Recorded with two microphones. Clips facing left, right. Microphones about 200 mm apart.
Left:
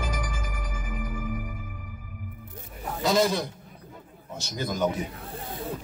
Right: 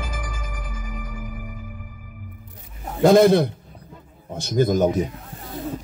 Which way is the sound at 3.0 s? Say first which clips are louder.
Right 10 dB; 55° right (ahead or behind).